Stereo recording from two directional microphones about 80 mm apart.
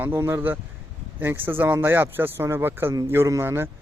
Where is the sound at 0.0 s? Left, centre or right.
Right.